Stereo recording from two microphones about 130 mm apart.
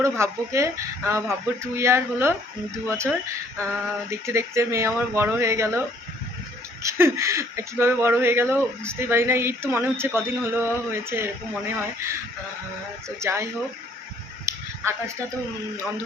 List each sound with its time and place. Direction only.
0.0 s speech: 20° right (ahead or behind)
4.1 s speech: 20° right (ahead or behind)
6.8 s speech: 20° right (ahead or behind)
13.1 s speech: 20° right (ahead or behind)
14.4 s a sound: 20° right (ahead or behind)